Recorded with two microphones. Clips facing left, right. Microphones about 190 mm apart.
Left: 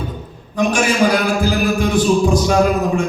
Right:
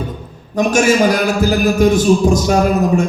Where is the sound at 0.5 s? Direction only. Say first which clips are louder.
Right 4 dB; 45° right (ahead or behind).